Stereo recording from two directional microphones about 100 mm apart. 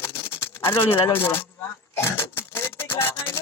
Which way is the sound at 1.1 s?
20° left (ahead or behind).